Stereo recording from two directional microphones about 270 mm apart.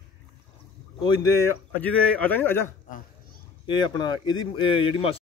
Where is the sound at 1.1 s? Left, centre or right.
Right.